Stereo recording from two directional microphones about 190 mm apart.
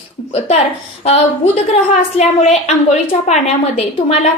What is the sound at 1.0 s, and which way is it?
A woman's voice, 35° left (ahead or behind).